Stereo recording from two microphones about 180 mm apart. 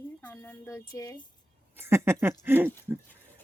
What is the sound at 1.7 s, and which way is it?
Speech, 15° right (ahead or behind).